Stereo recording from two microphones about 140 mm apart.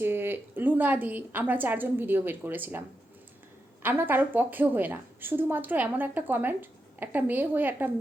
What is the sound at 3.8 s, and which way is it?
A woman's voice, 15° right (ahead or behind).